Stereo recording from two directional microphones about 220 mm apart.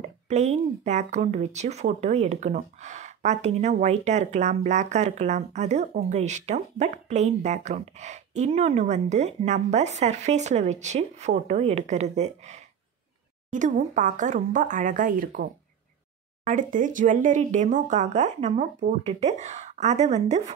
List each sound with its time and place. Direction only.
0.3 s speech: 30° right (ahead or behind)